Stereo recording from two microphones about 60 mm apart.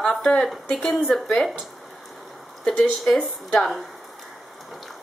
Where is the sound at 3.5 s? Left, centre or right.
Centre.